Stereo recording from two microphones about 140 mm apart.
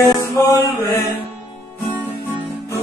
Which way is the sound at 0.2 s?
25° left (ahead or behind).